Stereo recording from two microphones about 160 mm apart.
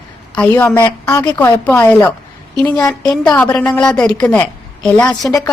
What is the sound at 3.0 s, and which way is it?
A woman's voice, 5° left (ahead or behind).